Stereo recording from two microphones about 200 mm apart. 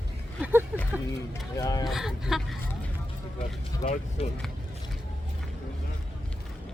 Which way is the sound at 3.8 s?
40° left (ahead or behind).